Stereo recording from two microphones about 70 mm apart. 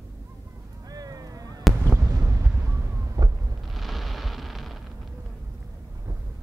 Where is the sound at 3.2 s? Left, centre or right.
Right.